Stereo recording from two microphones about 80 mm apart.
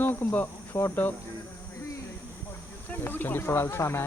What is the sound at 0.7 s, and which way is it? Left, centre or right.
Speech, left.